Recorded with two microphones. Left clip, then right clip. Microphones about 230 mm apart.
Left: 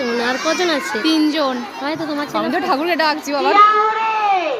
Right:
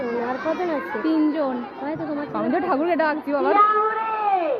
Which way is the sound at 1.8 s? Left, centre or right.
Left.